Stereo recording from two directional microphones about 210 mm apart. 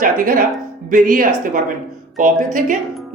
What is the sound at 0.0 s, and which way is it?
A man's voice, 40° right (ahead or behind).